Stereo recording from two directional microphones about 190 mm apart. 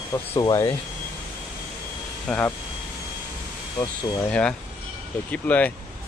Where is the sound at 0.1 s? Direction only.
20° left (ahead or behind).